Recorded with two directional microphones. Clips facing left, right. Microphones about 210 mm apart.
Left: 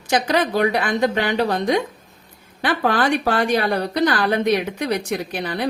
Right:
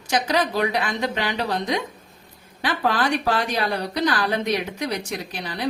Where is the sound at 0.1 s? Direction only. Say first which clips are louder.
Left 3 dB; 55° left (ahead or behind).